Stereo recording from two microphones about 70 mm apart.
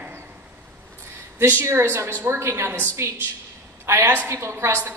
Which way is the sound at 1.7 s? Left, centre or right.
Right.